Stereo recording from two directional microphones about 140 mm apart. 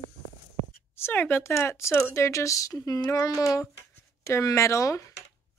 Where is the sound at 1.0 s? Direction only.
15° left (ahead or behind).